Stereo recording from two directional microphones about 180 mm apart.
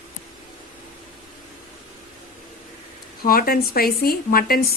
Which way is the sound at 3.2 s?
55° left (ahead or behind).